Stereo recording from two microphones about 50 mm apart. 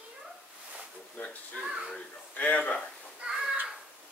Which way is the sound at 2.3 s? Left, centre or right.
Left.